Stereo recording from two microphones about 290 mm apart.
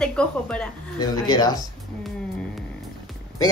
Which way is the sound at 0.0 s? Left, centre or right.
Centre.